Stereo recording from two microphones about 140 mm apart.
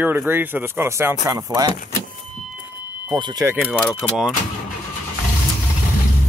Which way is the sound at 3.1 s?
30° right (ahead or behind).